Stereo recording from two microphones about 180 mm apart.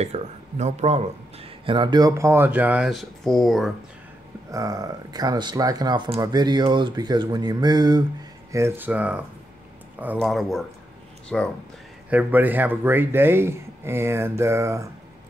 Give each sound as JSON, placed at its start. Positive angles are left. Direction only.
{"t": 0.0, "sound": "speech", "side_deg": -40}
{"t": 4.5, "sound": "speech", "side_deg": -20}
{"t": 12.1, "sound": "speech", "side_deg": -10}